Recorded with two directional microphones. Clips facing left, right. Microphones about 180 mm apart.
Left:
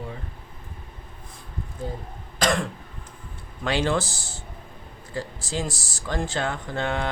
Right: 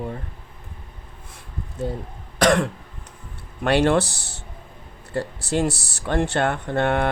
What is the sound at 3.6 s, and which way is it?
Speech, 65° right (ahead or behind).